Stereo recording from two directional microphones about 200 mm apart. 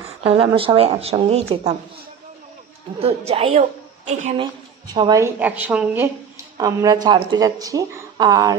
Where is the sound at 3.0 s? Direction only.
30° right (ahead or behind).